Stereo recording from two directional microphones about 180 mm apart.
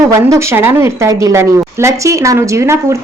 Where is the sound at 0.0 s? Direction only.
15° right (ahead or behind).